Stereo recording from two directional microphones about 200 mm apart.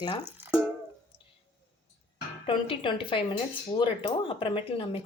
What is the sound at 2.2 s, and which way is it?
Speech, 25° left (ahead or behind).